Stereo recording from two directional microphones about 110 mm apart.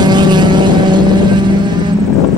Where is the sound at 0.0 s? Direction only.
40° right (ahead or behind).